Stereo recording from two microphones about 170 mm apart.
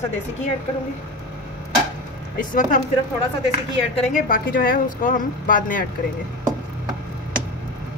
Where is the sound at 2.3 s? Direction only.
50° left (ahead or behind).